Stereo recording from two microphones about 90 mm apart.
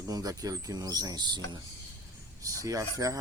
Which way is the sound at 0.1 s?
45° right (ahead or behind).